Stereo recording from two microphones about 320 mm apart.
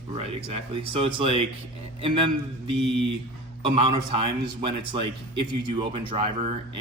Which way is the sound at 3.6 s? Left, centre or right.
Centre.